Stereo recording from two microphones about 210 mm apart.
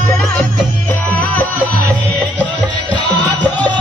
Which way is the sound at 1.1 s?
5° left (ahead or behind).